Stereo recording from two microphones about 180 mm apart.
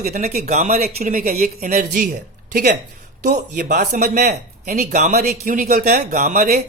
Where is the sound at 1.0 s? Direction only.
50° right (ahead or behind).